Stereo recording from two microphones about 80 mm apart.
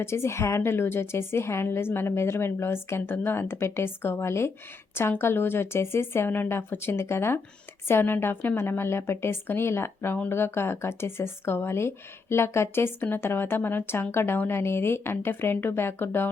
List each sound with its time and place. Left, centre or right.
0.0 s a woman's voice: left